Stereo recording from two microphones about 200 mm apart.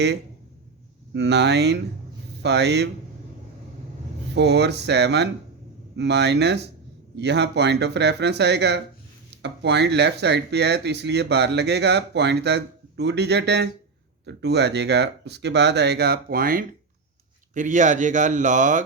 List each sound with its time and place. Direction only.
1.1 s speech: 60° right (ahead or behind)
4.4 s speech: 60° right (ahead or behind); by 18.8 s 40° right (ahead or behind)